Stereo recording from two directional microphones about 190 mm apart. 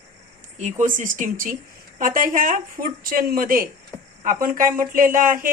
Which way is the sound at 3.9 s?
20° left (ahead or behind).